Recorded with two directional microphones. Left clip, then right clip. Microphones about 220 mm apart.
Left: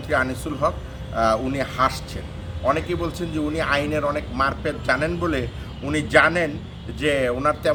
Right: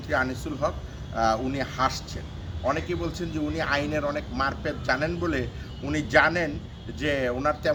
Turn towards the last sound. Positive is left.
turn(degrees=5)  # may be behind; listen again after turning